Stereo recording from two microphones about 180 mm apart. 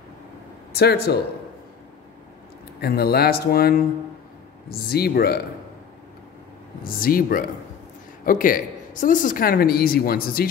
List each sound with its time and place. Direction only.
0.7 s a woman's voice: 60° left (ahead or behind)
2.8 s a woman's voice: 60° left (ahead or behind)
6.8 s a woman's voice: 55° left (ahead or behind)